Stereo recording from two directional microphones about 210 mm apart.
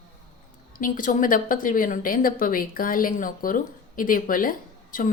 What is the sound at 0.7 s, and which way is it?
A woman's voice, 40° left (ahead or behind).